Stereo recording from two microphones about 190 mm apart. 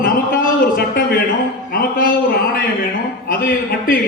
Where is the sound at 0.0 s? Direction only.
50° left (ahead or behind).